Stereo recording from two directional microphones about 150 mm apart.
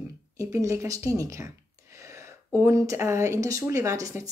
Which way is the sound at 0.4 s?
20° right (ahead or behind).